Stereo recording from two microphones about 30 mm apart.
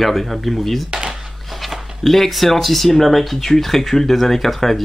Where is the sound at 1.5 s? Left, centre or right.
Centre.